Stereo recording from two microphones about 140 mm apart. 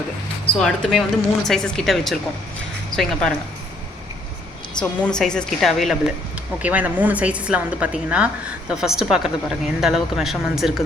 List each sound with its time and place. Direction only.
0.5 s a woman's voice: 5° left (ahead or behind)
4.8 s a woman's voice: 5° left (ahead or behind)
6.6 s a woman's voice: 10° right (ahead or behind)